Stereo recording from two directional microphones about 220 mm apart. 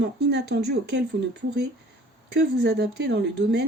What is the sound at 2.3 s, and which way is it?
Speech, 50° right (ahead or behind).